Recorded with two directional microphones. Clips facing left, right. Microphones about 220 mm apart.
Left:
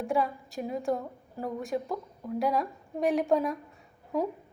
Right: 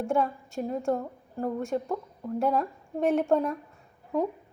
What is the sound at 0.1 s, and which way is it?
A woman's voice, centre (ahead or behind).